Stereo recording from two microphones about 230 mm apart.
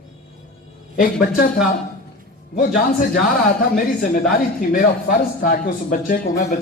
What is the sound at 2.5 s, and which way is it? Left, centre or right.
Speech, left.